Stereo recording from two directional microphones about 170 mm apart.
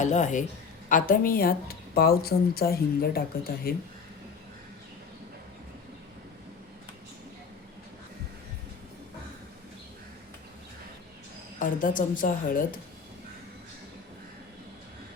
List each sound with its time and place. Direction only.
0.0 s a woman's voice: 45° left (ahead or behind); by 3.8 s 60° left (ahead or behind)
11.6 s a woman's voice: 50° left (ahead or behind)